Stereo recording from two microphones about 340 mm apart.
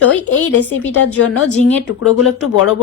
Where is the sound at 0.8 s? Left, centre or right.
Left.